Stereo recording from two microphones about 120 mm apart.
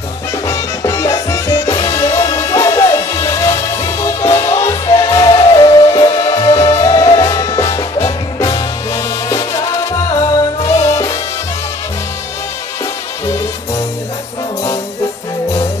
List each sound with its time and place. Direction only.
0.5 s music: 25° left (ahead or behind)